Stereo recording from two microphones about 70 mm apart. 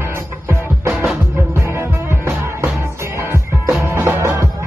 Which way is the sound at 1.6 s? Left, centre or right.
Right.